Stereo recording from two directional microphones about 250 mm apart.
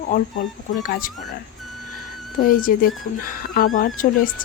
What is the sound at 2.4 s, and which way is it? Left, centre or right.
Speech, left.